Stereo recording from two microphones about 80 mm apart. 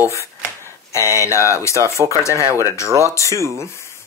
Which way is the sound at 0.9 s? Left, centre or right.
Left.